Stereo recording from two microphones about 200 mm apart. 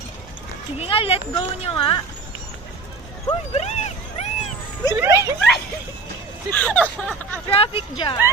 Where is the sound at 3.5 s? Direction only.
30° left (ahead or behind).